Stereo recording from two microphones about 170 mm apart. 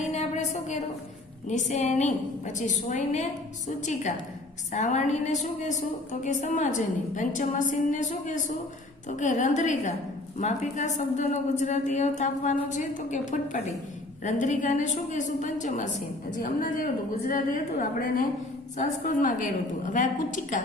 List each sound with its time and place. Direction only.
0.1 s a sound: 40° left (ahead or behind)
1.5 s a woman's voice: 45° left (ahead or behind)
4.7 s a woman's voice: 45° left (ahead or behind)